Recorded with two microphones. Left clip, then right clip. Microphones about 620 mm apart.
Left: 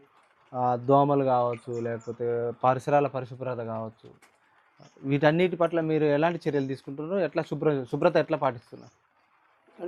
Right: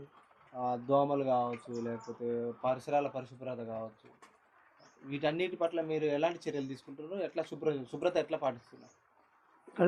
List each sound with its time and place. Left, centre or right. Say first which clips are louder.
0.5 s speech: left 8 dB; left
5.0 s speech: left 10 dB; left